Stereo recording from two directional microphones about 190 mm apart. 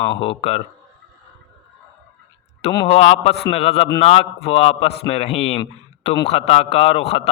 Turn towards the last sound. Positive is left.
turn(degrees=30)  # may be behind; listen again after turning